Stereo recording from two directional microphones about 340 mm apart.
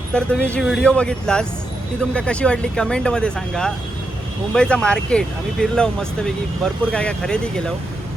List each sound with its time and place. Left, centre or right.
0.1 s speech: centre